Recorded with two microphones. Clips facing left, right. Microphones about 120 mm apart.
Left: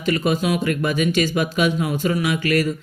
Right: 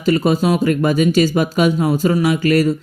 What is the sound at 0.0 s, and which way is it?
Speech, 35° right (ahead or behind).